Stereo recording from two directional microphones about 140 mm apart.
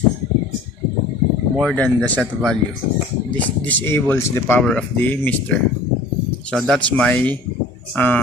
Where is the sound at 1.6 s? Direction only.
5° left (ahead or behind).